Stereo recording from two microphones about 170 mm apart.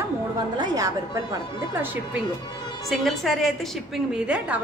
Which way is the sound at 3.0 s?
Centre (ahead or behind).